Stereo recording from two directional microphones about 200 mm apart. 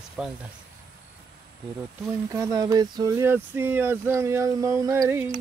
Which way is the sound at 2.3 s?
15° right (ahead or behind).